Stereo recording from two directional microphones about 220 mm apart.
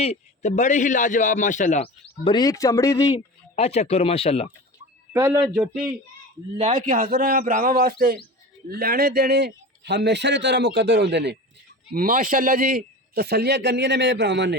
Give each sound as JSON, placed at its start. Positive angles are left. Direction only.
{"t": 0.0, "sound": "a man's voice", "side_deg": 30}
{"t": 3.5, "sound": "speech", "side_deg": 30}
{"t": 5.1, "sound": "a man's voice", "side_deg": -15}
{"t": 5.5, "sound": "speech", "side_deg": -5}
{"t": 6.6, "sound": "a man's voice", "side_deg": -35}
{"t": 11.9, "sound": "speech", "side_deg": -40}